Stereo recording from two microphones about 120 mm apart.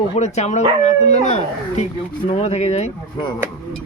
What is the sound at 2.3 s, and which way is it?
Speech, 60° left (ahead or behind).